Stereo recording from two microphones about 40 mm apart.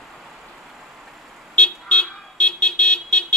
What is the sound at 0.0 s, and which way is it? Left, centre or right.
Vehicle, centre.